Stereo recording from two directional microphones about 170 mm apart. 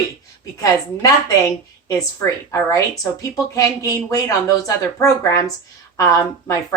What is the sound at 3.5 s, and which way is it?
A woman's voice, 20° left (ahead or behind).